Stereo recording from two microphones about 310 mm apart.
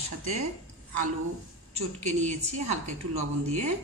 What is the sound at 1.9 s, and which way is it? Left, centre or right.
A woman's voice, right.